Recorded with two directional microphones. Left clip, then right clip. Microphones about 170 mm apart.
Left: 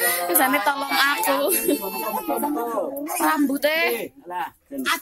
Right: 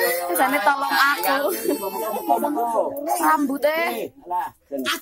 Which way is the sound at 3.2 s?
10° left (ahead or behind).